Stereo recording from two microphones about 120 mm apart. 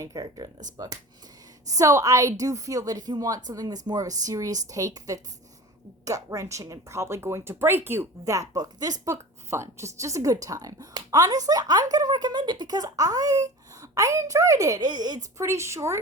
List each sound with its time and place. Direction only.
0.0 s speech: 35° right (ahead or behind)
1.6 s speech: 30° right (ahead or behind)
15.4 s speech: 25° right (ahead or behind)